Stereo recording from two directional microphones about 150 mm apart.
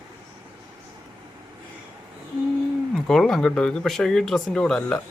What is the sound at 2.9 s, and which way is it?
Speech, 5° left (ahead or behind).